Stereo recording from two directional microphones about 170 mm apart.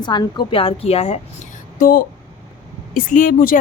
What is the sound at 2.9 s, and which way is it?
Speech, 55° left (ahead or behind).